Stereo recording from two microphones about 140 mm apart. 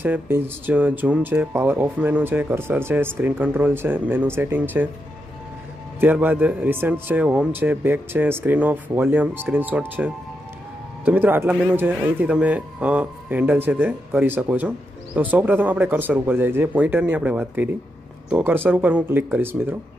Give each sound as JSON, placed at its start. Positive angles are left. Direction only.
{"t": 0.0, "sound": "speech", "side_deg": -15}
{"t": 5.9, "sound": "speech", "side_deg": -10}